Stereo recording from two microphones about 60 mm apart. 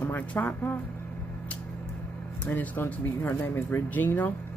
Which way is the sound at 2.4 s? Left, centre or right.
Left.